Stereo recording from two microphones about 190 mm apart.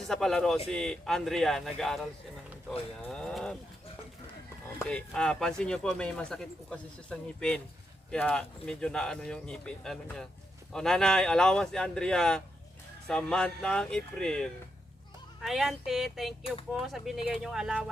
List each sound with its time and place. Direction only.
0.1 s speech: centre (ahead or behind)
4.9 s speech: 5° left (ahead or behind)
16.4 s speech: 30° left (ahead or behind)
16.8 s speech: centre (ahead or behind)